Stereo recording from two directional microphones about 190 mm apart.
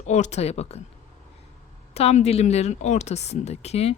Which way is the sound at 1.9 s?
35° left (ahead or behind).